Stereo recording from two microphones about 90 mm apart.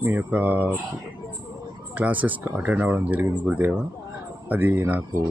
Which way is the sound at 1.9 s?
15° right (ahead or behind).